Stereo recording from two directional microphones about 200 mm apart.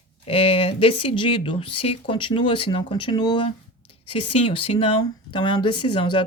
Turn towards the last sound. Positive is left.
turn(degrees=25)  # may be behind; listen again after turning